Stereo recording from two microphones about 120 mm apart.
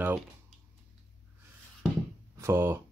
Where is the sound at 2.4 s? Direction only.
20° right (ahead or behind).